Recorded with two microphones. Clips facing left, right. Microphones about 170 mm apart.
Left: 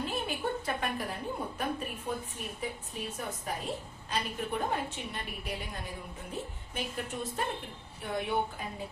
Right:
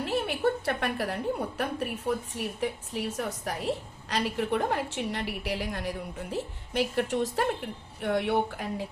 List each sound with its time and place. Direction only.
0.0 s a woman's voice: 75° right (ahead or behind)